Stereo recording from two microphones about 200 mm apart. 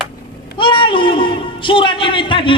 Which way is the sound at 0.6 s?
25° left (ahead or behind).